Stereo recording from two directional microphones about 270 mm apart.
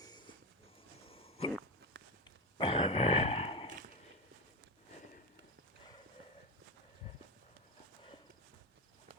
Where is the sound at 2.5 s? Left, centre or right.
Centre.